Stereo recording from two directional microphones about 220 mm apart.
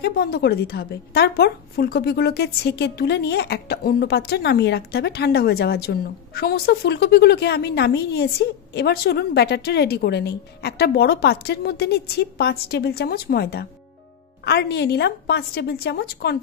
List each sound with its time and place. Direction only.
0.0 s a woman's voice: 45° left (ahead or behind)